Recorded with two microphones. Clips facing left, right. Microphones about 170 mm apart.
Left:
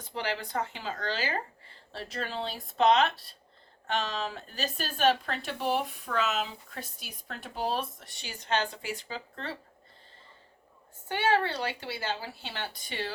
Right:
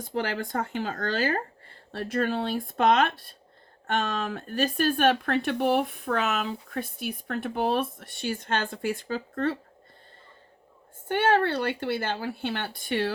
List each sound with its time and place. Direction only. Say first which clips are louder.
0.0 s speech: right 5 dB; 50° right (ahead or behind)
11.1 s speech: right 4 dB; 55° right (ahead or behind)